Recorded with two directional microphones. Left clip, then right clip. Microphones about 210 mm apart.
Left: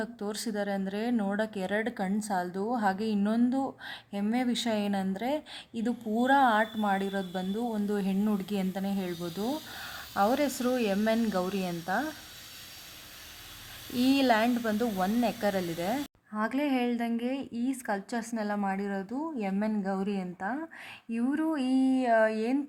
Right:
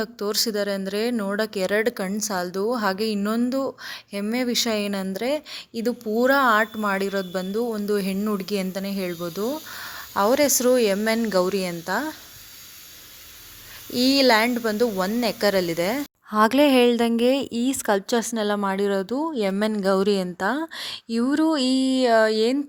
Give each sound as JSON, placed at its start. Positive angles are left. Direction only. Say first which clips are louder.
{"t": 0.0, "sound": "speech", "louder": "right 11 dB", "side_deg": -15}
{"t": 13.9, "sound": "speech", "louder": "right 8 dB", "side_deg": -15}
{"t": 16.3, "sound": "a woman's voice", "louder": "right 14 dB", "side_deg": -45}
{"t": 16.6, "sound": "a woman's voice", "louder": "right 13 dB", "side_deg": -60}
{"t": 17.8, "sound": "a woman's voice", "louder": "right 12 dB", "side_deg": -45}
{"t": 18.5, "sound": "speech", "louder": "right 10 dB", "side_deg": -35}
{"t": 20.0, "sound": "a woman's voice", "louder": "right 13 dB", "side_deg": -60}
{"t": 20.4, "sound": "speech", "louder": "right 10 dB", "side_deg": -35}